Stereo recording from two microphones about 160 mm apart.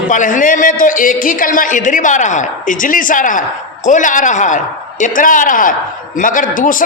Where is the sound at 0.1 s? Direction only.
55° left (ahead or behind).